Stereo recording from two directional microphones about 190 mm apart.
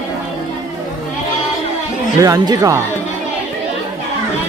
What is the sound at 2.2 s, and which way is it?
Speech, 20° right (ahead or behind).